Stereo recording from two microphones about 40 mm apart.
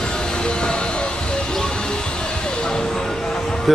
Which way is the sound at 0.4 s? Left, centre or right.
Left.